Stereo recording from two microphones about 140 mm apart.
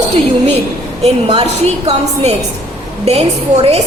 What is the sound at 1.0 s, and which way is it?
Speech, 45° right (ahead or behind).